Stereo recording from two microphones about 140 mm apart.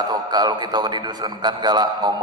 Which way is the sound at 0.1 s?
30° right (ahead or behind).